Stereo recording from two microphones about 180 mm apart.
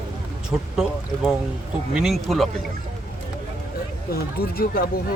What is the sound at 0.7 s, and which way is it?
Speech, 5° right (ahead or behind).